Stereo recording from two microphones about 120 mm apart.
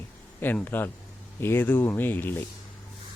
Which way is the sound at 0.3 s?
15° left (ahead or behind).